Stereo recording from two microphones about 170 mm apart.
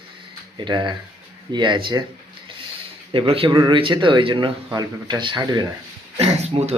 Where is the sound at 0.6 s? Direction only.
25° right (ahead or behind).